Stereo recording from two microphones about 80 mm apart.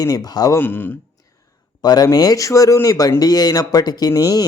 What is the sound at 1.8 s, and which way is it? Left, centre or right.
Speech, left.